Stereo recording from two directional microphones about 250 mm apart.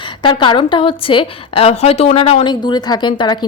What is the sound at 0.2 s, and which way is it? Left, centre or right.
A woman's voice, centre.